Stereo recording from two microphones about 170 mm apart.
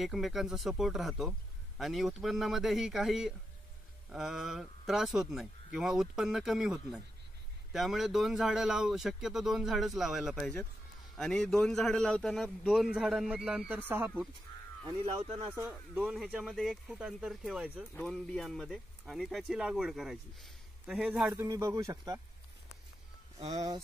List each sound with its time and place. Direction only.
0.0 s speech: centre (ahead or behind)
15.5 s speech: 15° right (ahead or behind)
16.0 s speech: 5° right (ahead or behind)
21.3 s speech: 20° right (ahead or behind)
23.5 s speech: 25° right (ahead or behind)